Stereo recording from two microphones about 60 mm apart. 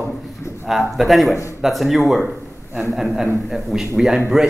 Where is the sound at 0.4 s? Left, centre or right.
Left.